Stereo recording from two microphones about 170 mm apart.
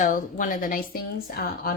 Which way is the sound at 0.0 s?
50° left (ahead or behind).